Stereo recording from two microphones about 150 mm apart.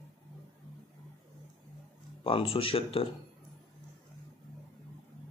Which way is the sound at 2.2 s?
40° left (ahead or behind).